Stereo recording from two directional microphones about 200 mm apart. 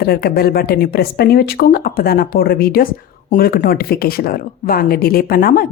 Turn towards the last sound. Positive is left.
turn(degrees=45)  # may be behind; listen again after turning